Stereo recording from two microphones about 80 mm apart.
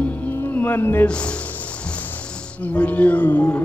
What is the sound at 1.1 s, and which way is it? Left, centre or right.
Speech, centre.